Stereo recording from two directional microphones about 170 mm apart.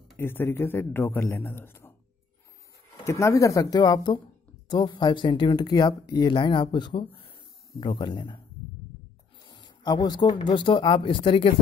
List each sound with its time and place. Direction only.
0.2 s a man's voice: 15° left (ahead or behind)
3.1 s speech: 15° left (ahead or behind)
9.5 s speech: 25° left (ahead or behind)